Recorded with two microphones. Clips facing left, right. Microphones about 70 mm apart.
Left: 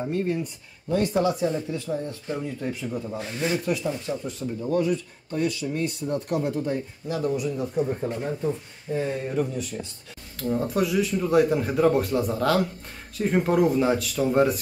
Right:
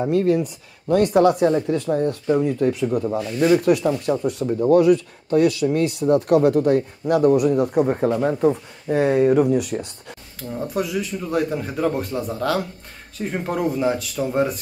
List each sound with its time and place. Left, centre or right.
0.0 s speech: right
3.3 s speech: right
10.5 s a man's voice: centre